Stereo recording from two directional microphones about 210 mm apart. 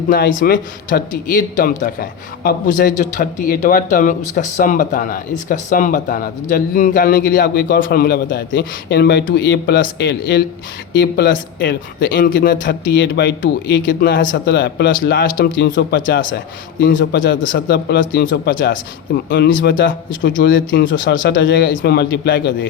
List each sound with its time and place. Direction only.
0.1 s a man's voice: 40° left (ahead or behind)
12.6 s a man's voice: 55° left (ahead or behind)